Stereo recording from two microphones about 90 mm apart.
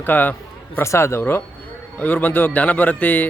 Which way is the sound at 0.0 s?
20° left (ahead or behind).